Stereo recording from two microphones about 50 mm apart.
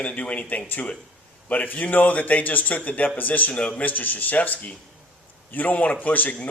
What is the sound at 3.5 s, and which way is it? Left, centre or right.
Speech, left.